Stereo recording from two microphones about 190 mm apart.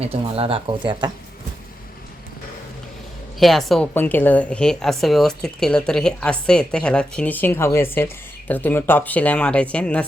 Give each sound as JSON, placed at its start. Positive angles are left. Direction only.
{"t": 0.0, "sound": "speech", "side_deg": -30}
{"t": 3.4, "sound": "a woman's voice", "side_deg": 0}